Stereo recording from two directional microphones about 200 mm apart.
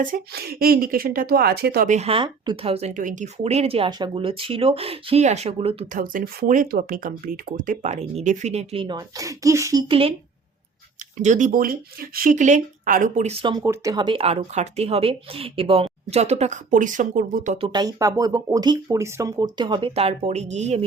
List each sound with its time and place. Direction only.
0.0 s a woman's voice: 45° right (ahead or behind); by 5.7 s 30° right (ahead or behind)
5.9 s a woman's voice: 45° right (ahead or behind); by 9.8 s 15° right (ahead or behind)
9.9 s speech: 30° right (ahead or behind)
11.2 s a woman's voice: 40° right (ahead or behind)
13.4 s speech: 20° right (ahead or behind); by 17.7 s 35° right (ahead or behind)
17.7 s speech: 20° right (ahead or behind); by 20.8 s 35° right (ahead or behind)